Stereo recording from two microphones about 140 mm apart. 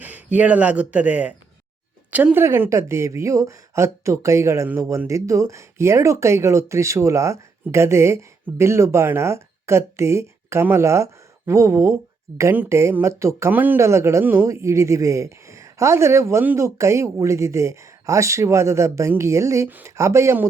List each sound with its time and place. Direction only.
0.0 s speech: 10° right (ahead or behind)